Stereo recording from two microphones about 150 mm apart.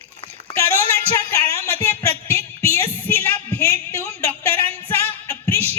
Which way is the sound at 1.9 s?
15° left (ahead or behind).